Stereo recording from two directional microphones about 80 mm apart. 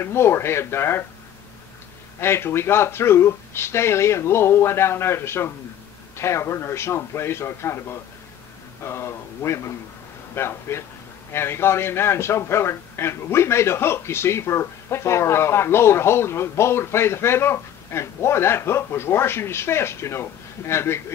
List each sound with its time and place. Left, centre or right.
0.0 s a man's voice: left
2.1 s a man's voice: left